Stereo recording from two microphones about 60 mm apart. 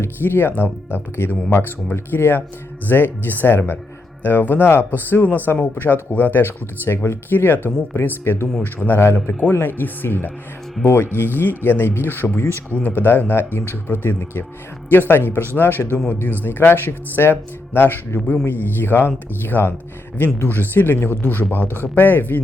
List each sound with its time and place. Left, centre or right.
0.0 s a woman's voice: left